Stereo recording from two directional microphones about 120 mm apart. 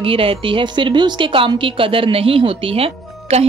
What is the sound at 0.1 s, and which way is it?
A woman's voice, 45° right (ahead or behind).